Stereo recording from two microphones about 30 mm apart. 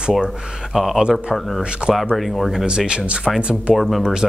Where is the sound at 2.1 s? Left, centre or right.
Centre.